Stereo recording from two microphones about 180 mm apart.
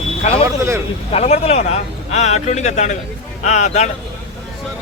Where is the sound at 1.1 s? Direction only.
35° left (ahead or behind).